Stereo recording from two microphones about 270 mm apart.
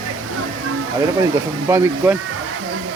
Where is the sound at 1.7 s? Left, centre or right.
Centre.